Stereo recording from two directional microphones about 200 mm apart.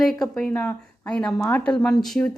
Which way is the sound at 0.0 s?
Centre (ahead or behind).